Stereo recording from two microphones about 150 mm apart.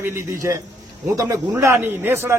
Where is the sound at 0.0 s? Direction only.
15° right (ahead or behind).